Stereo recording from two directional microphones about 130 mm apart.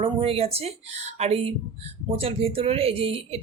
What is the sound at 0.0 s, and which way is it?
Speech, 45° right (ahead or behind).